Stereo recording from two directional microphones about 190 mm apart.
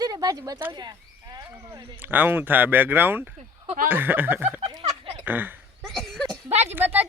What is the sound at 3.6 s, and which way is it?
Speech, 40° right (ahead or behind).